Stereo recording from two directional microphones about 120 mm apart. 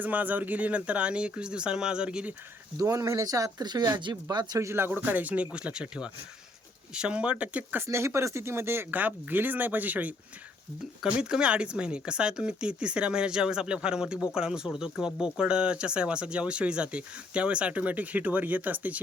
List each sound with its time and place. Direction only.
0.0 s speech: 15° right (ahead or behind)
2.7 s speech: 30° right (ahead or behind); by 18.9 s 15° right (ahead or behind)